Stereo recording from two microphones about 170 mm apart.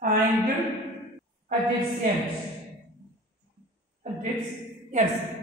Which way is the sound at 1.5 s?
50° right (ahead or behind).